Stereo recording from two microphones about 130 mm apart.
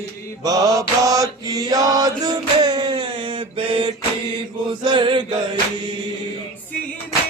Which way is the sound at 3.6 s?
40° right (ahead or behind).